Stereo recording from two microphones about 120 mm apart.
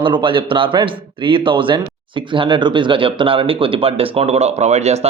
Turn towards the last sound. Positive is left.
turn(degrees=-65)  # may be behind; listen again after turning